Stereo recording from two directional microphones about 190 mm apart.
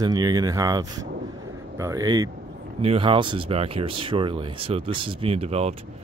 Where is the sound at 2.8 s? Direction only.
30° right (ahead or behind).